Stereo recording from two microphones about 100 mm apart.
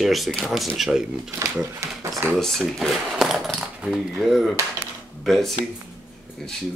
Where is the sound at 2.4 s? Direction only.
5° left (ahead or behind).